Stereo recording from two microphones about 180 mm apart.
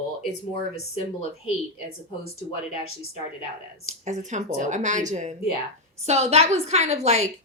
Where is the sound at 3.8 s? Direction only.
40° right (ahead or behind).